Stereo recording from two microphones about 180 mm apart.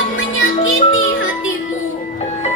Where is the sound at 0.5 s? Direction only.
35° left (ahead or behind).